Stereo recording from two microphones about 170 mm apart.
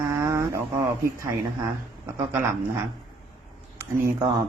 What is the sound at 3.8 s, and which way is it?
Speech, 15° right (ahead or behind).